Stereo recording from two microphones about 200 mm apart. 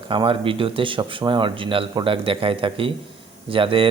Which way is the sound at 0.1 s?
25° right (ahead or behind).